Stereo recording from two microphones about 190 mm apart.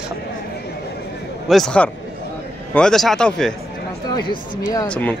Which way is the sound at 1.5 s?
5° left (ahead or behind).